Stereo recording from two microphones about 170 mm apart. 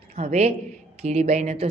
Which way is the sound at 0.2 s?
40° right (ahead or behind).